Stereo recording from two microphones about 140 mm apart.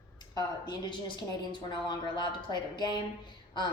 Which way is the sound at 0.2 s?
30° left (ahead or behind).